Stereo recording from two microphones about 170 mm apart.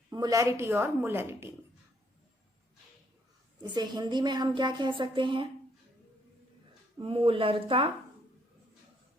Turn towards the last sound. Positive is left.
turn(degrees=-30)  # may be behind; listen again after turning